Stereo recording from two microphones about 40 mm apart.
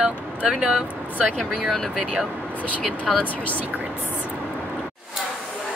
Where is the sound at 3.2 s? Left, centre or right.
Left.